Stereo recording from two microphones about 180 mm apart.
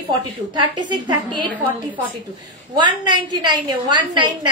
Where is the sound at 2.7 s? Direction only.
25° right (ahead or behind).